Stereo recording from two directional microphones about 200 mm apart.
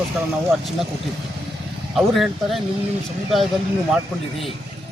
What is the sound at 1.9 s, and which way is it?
Speech, centre (ahead or behind).